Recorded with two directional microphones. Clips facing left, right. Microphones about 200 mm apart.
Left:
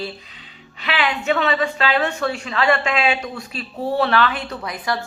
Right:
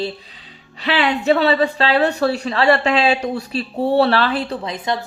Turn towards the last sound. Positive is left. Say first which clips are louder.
# right 2 dB
turn(degrees=-20)  # may be behind; listen again after turning